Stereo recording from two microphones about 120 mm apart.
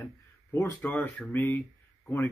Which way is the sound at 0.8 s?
10° left (ahead or behind).